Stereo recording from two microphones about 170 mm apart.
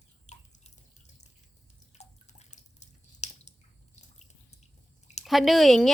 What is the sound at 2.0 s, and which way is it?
Drip, 40° left (ahead or behind).